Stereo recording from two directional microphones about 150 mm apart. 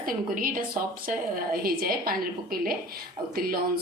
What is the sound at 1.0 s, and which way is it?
A woman's voice, 80° right.